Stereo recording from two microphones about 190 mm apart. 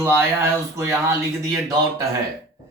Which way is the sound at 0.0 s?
15° right (ahead or behind).